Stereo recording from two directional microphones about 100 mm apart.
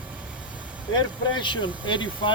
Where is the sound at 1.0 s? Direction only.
50° left (ahead or behind).